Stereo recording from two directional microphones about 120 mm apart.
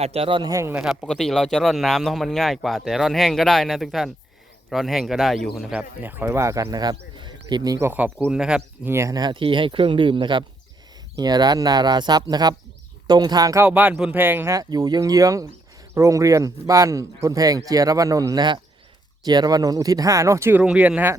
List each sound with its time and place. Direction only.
0.0 s speech: 55° right (ahead or behind)
0.5 s speech: 25° right (ahead or behind)
0.8 s speech: centre (ahead or behind)
6.0 s speech: 15° right (ahead or behind); by 6.9 s 30° right (ahead or behind)
6.9 s a sound: 40° right (ahead or behind)
7.8 s speech: 15° right (ahead or behind)
8.9 s speech: 25° right (ahead or behind)
13.7 s speech: 15° right (ahead or behind)
14.5 s speech: 30° right (ahead or behind)
20.6 s speech: 10° right (ahead or behind)